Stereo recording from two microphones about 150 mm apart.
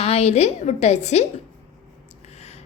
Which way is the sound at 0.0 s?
45° left (ahead or behind).